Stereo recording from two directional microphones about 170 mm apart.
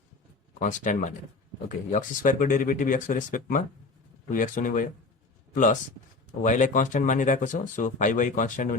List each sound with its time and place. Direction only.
0.6 s speech: 45° left (ahead or behind)
6.4 s speech: 45° left (ahead or behind)